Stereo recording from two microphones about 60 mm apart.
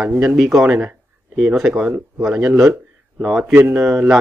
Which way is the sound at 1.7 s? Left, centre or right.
Right.